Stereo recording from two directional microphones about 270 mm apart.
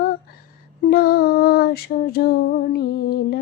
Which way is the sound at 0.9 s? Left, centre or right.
Left.